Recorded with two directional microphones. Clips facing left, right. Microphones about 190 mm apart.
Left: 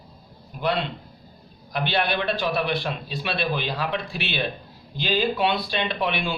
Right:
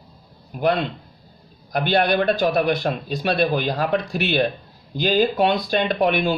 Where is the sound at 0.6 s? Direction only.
45° right (ahead or behind).